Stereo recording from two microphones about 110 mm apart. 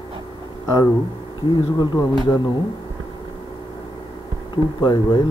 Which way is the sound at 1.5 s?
40° left (ahead or behind).